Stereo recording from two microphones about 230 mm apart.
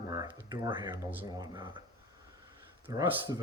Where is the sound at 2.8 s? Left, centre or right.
Centre.